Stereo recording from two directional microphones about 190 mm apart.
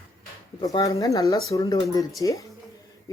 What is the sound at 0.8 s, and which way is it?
Speech, 15° left (ahead or behind).